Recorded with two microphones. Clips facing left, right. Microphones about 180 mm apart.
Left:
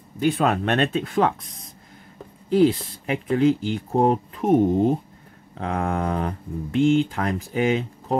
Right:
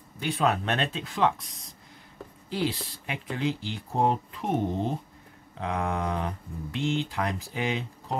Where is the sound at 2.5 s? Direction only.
50° left (ahead or behind).